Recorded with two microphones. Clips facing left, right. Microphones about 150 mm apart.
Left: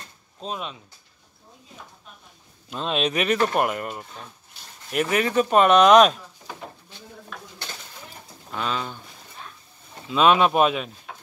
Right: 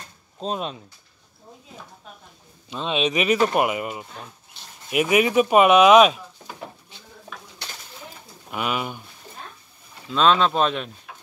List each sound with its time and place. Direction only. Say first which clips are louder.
0.4 s speech: right 4 dB; 35° right (ahead or behind)
2.7 s speech: right 1 dB; centre (ahead or behind)
8.5 s speech: right 2 dB; 10° right (ahead or behind)
10.0 s speech: left 1 dB; 10° left (ahead or behind)